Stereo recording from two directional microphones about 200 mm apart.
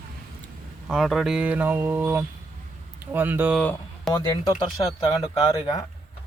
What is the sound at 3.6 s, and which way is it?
Speech, 5° left (ahead or behind).